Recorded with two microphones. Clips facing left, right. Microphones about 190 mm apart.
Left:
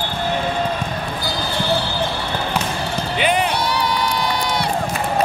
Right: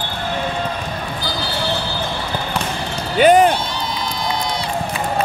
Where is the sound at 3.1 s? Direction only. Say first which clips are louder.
Right 9 dB; 45° right (ahead or behind).